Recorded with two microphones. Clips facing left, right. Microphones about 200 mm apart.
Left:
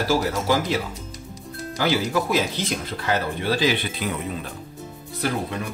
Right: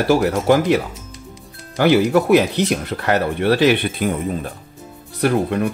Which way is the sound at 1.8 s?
60° right (ahead or behind).